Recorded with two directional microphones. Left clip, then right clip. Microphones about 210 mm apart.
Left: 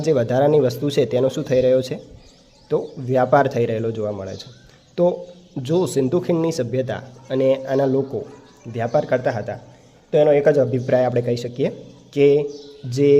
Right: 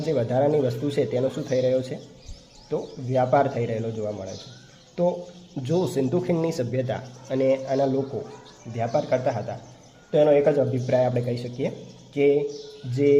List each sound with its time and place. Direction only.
0.0 s a man's voice: 40° left (ahead or behind)
5.5 s a man's voice: 30° left (ahead or behind)